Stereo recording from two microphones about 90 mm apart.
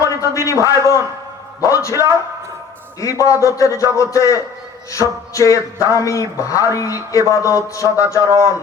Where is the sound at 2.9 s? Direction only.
35° left (ahead or behind).